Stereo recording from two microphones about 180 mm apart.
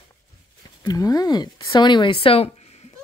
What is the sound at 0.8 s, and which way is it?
Speech, 20° left (ahead or behind).